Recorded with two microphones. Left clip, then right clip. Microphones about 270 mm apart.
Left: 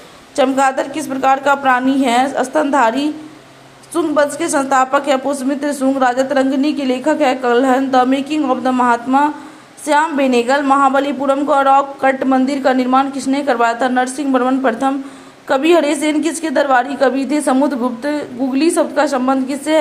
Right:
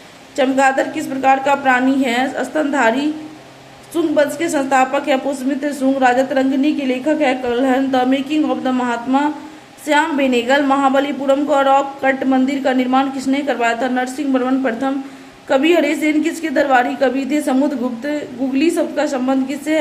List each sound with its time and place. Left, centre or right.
0.3 s a woman's voice: centre